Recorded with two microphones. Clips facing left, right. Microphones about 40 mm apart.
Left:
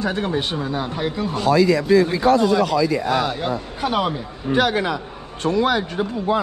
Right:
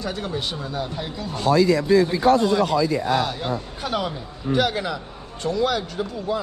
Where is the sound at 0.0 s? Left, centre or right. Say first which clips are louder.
Left 5 dB; left.